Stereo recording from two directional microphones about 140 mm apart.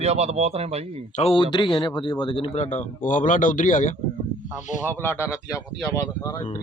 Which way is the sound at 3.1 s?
70° left (ahead or behind).